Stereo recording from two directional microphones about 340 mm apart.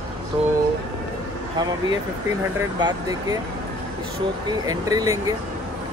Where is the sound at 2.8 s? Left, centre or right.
Centre.